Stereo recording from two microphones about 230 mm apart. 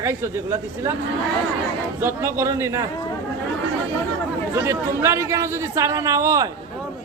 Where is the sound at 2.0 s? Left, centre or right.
Centre.